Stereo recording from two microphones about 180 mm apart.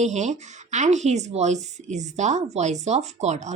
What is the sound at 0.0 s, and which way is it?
A woman's voice, 40° right (ahead or behind).